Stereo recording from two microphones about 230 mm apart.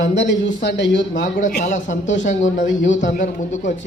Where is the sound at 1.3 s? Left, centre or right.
Left.